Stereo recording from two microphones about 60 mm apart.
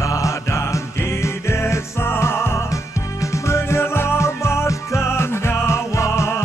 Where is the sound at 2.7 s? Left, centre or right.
Left.